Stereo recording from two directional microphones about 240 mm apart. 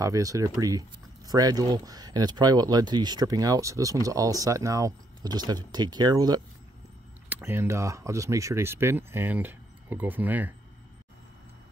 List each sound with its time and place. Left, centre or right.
0.0 s speech: centre